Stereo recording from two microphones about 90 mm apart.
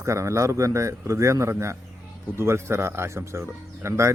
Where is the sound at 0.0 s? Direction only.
35° right (ahead or behind).